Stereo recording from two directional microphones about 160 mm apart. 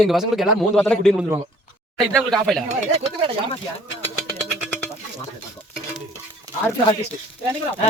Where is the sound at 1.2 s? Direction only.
20° right (ahead or behind).